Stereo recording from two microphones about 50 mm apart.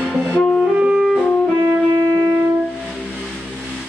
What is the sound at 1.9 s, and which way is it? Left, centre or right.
Wind instrument, right.